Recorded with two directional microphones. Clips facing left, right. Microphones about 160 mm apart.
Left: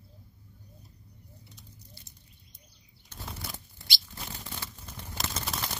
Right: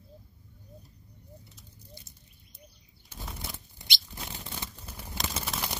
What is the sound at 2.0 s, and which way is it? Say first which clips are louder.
Bird: right 3 dB; 20° right (ahead or behind).